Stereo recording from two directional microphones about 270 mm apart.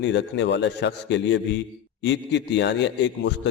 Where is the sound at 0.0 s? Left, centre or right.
Left.